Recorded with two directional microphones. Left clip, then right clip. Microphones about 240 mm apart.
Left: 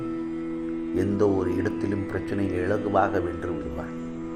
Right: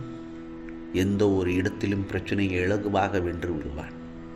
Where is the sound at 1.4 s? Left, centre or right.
Right.